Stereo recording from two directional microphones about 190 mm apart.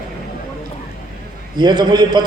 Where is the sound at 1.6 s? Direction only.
25° right (ahead or behind).